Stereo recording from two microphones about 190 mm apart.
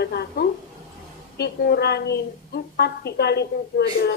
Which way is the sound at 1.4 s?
60° left (ahead or behind).